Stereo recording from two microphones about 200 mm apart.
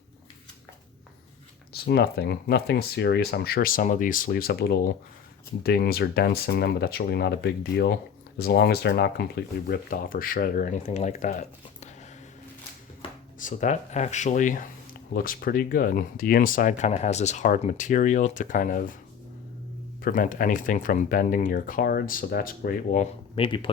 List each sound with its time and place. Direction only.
1.7 s speech: 55° left (ahead or behind); by 11.9 s 35° left (ahead or behind)
13.0 s a sound: 25° left (ahead or behind)
13.4 s speech: 40° left (ahead or behind)
20.0 s speech: 45° left (ahead or behind)
23.3 s speech: 25° left (ahead or behind)